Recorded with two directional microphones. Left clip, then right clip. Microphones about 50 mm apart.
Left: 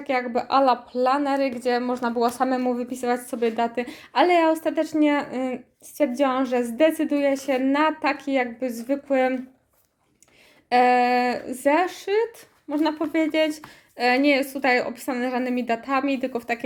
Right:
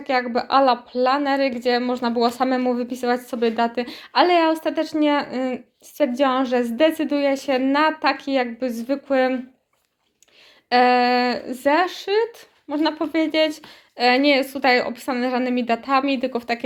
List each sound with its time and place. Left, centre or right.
0.0 s a woman's voice: left
10.7 s a woman's voice: left